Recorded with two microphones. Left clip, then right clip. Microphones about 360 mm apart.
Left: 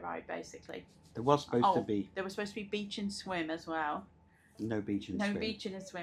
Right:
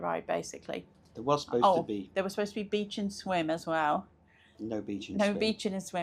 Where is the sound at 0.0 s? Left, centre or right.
Right.